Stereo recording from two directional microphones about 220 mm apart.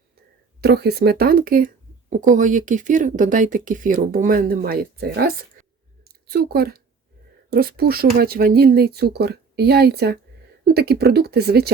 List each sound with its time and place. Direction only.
0.6 s speech: 45° right (ahead or behind)